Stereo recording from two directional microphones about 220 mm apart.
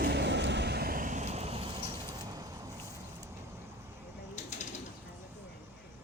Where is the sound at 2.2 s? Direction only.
15° right (ahead or behind).